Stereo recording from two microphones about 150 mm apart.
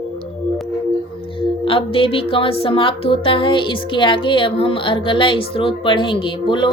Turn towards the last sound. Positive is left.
turn(degrees=35)  # may be behind; listen again after turning